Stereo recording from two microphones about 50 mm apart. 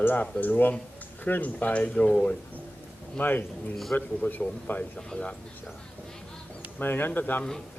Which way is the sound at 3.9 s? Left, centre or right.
Left.